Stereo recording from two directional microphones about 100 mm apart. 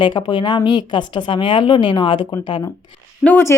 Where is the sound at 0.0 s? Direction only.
55° left (ahead or behind).